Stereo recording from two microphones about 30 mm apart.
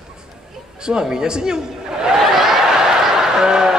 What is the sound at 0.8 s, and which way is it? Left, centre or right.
A man's voice, right.